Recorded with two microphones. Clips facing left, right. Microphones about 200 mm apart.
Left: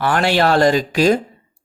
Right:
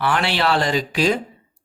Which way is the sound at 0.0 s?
45° left (ahead or behind).